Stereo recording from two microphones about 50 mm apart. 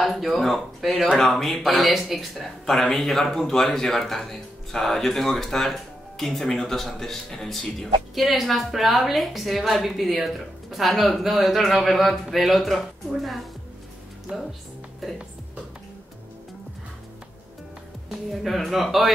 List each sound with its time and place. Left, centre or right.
0.0 s speech: centre
2.6 s speech: centre
14.3 s speech: centre
18.1 s speech: centre